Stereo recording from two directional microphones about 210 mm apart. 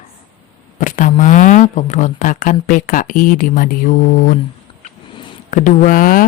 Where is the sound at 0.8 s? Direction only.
40° left (ahead or behind).